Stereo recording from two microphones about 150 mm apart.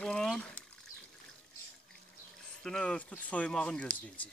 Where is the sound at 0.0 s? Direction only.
5° left (ahead or behind).